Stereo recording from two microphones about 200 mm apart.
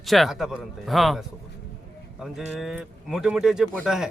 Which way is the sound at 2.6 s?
Centre (ahead or behind).